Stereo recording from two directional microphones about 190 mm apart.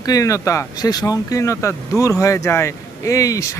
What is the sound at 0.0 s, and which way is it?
Speech, 20° left (ahead or behind).